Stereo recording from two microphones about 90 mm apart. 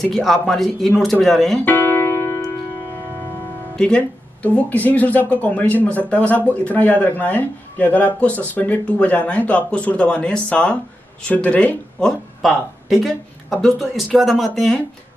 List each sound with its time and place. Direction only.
0.0 s speech: centre (ahead or behind)
1.6 s music: 20° left (ahead or behind)
3.7 s speech: 15° left (ahead or behind)
12.4 s speech: centre (ahead or behind)